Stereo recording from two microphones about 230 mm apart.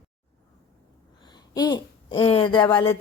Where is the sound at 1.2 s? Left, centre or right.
Centre.